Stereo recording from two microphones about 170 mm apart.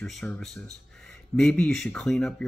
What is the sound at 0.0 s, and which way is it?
Speech, centre (ahead or behind).